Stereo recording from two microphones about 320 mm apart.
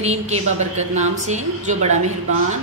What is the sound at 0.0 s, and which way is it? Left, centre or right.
A man's voice, centre.